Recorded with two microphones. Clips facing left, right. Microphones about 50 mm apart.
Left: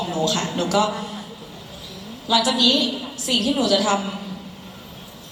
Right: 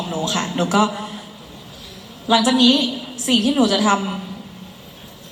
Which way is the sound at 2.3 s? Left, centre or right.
Right.